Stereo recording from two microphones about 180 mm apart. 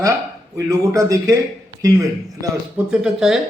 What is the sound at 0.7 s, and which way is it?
Speech, 15° right (ahead or behind).